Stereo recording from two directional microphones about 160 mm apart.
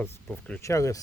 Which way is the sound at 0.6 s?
20° left (ahead or behind).